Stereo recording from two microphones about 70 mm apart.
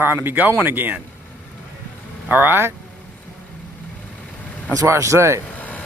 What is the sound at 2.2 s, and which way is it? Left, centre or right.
Speech, right.